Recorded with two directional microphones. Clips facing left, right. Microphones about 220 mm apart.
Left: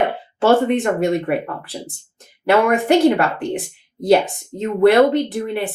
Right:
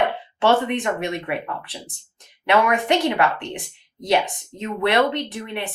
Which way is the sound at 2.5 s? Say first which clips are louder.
Left 5 dB; 35° left (ahead or behind).